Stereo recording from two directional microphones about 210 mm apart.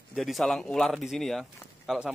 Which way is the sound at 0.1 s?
Centre (ahead or behind).